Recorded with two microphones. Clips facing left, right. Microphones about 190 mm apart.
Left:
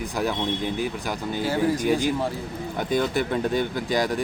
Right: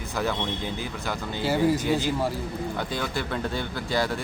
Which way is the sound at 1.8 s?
15° left (ahead or behind).